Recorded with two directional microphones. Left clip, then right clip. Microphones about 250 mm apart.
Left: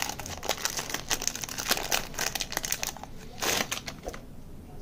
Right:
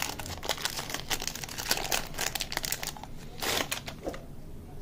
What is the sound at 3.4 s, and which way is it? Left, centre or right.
Typewriter, centre.